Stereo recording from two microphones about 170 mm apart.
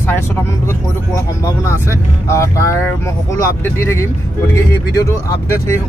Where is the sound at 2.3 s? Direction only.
15° left (ahead or behind).